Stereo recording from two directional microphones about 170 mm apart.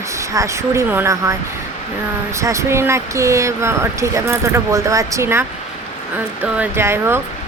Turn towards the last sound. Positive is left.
turn(degrees=-15)  # may be behind; listen again after turning